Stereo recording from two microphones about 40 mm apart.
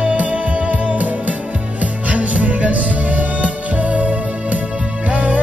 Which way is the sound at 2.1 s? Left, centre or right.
Right.